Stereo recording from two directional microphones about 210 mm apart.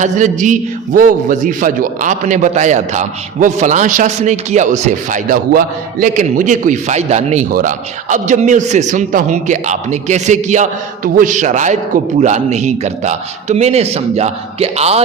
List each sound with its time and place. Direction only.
0.0 s a man's voice: 35° right (ahead or behind)